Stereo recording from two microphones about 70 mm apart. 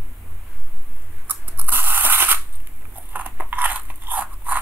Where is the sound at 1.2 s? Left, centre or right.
Right.